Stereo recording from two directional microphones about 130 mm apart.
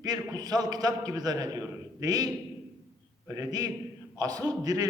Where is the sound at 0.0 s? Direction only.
30° right (ahead or behind).